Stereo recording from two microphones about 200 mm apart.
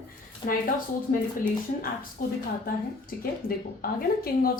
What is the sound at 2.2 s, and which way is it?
Speech, 45° left (ahead or behind).